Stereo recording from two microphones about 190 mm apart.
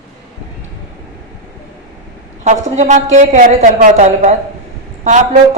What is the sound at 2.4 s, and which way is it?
A woman's voice, 40° right (ahead or behind).